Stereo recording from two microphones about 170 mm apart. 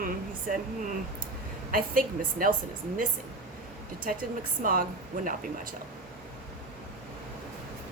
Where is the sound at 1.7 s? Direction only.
55° right (ahead or behind).